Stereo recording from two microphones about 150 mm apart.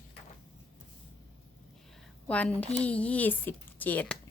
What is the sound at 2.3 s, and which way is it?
Speech, 10° left (ahead or behind).